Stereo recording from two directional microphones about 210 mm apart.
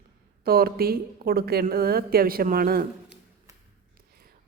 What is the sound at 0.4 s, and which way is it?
A woman's voice, 45° right (ahead or behind).